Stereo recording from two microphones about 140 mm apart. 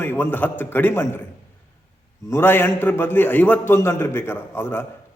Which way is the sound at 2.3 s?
15° left (ahead or behind).